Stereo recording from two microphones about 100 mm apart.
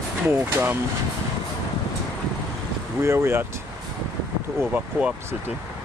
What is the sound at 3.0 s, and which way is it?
Speech, 25° right (ahead or behind).